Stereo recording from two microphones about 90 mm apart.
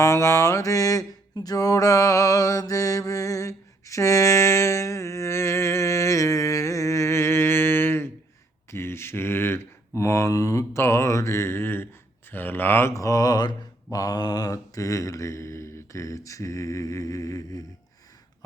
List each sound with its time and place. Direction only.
0.0 s a sound: 35° left (ahead or behind)
8.7 s speech: 30° left (ahead or behind)
12.3 s mantra: 20° left (ahead or behind); by 17.7 s 40° left (ahead or behind)